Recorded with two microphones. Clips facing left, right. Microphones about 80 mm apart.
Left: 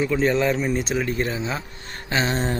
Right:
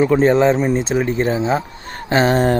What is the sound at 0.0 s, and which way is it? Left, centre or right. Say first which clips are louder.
Speech: right 7 dB; right.